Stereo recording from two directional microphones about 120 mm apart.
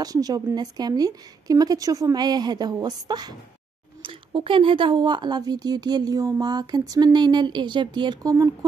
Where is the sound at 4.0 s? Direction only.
45° right (ahead or behind).